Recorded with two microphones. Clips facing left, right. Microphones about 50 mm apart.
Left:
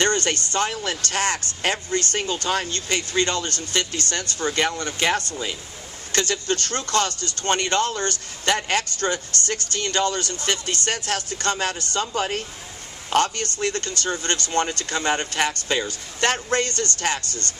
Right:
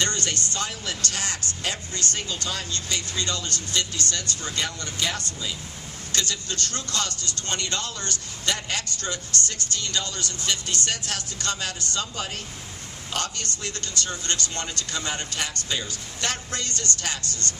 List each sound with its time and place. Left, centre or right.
0.0 s speech: left